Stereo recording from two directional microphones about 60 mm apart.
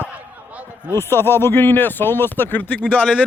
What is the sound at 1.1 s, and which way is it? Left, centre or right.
Speech, left.